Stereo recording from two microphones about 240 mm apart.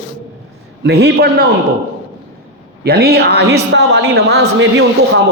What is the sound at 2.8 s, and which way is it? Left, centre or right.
A man's voice, right.